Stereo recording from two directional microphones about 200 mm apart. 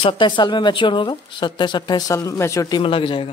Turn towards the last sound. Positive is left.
turn(degrees=25)  # may be behind; listen again after turning